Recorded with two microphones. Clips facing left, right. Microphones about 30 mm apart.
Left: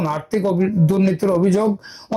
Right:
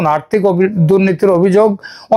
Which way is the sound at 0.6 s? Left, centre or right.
Right.